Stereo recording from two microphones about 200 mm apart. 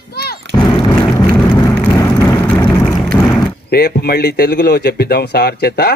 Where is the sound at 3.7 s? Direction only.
55° left (ahead or behind).